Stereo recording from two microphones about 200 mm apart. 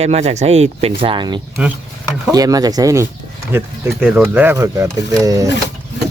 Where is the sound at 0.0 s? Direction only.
30° right (ahead or behind); by 5.5 s 15° right (ahead or behind).